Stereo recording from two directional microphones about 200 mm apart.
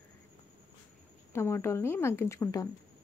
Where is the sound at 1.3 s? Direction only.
10° left (ahead or behind).